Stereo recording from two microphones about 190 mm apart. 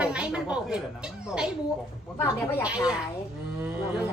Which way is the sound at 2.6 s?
5° right (ahead or behind).